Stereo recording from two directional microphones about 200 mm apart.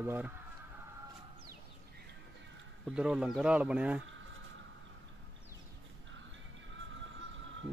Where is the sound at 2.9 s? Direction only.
5° right (ahead or behind).